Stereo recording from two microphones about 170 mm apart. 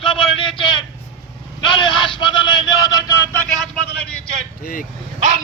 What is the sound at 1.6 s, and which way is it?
Vehicle, 30° left (ahead or behind).